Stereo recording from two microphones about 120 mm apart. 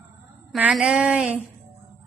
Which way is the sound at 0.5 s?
10° right (ahead or behind).